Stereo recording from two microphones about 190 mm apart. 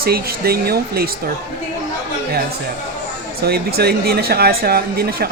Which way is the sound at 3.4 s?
55° right (ahead or behind).